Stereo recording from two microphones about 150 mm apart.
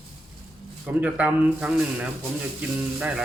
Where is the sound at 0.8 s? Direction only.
10° right (ahead or behind).